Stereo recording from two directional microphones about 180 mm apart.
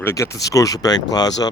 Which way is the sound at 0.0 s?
20° left (ahead or behind).